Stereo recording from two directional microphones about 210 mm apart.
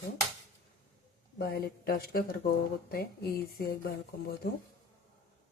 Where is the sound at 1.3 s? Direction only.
45° left (ahead or behind).